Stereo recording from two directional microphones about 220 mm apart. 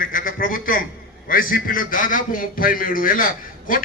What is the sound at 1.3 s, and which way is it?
A man's voice, 40° left (ahead or behind).